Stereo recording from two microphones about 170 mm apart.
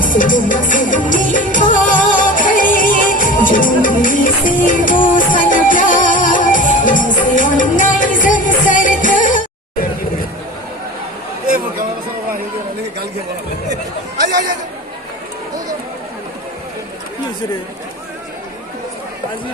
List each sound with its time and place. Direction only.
0.0 s music: 50° left (ahead or behind)